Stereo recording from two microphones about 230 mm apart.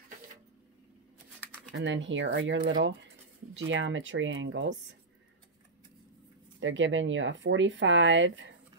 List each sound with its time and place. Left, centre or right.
1.7 s speech: right
6.6 s speech: right